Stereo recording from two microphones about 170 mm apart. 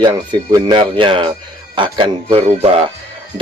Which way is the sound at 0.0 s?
25° right (ahead or behind).